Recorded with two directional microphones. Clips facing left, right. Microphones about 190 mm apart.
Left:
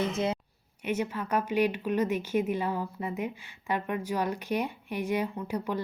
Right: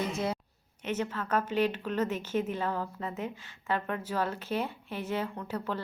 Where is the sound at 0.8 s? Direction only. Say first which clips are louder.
Left 2 dB; 10° left (ahead or behind).